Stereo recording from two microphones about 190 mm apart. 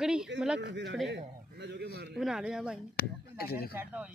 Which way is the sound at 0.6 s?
65° right (ahead or behind).